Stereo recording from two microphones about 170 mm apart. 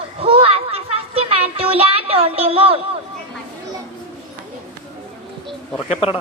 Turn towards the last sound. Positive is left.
turn(degrees=35)  # may be behind; listen again after turning